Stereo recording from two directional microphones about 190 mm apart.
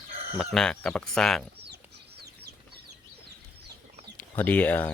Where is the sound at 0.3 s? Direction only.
5° left (ahead or behind).